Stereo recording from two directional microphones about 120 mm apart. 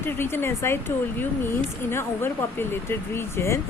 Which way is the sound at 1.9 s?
20° left (ahead or behind).